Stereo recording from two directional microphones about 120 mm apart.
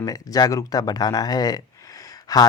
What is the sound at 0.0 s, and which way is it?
Speech, 30° left (ahead or behind).